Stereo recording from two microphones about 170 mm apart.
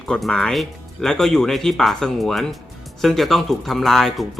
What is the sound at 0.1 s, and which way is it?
Speech, 5° left (ahead or behind).